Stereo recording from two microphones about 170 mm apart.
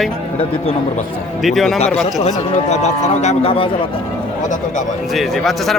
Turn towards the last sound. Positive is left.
turn(degrees=0)  # may be behind; listen again after turning